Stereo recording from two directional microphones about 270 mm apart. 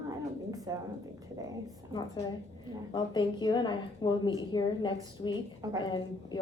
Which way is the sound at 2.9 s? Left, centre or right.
Centre.